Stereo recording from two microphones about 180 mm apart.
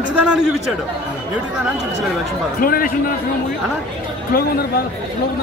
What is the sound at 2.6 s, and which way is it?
Speech, 50° left (ahead or behind).